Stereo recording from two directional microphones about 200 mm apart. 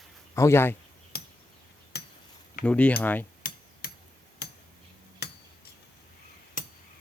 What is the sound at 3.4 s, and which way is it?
Hammer, 50° left (ahead or behind).